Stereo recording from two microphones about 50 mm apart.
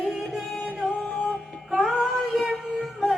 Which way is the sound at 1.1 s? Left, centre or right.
Left.